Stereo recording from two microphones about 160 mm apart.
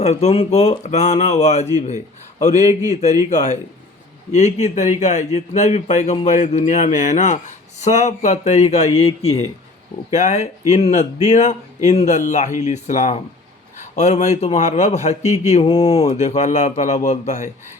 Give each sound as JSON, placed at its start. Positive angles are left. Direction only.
{"t": 0.0, "sound": "speech", "side_deg": 45}